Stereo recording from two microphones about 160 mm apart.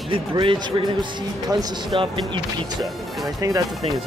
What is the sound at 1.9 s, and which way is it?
Music, 30° right (ahead or behind).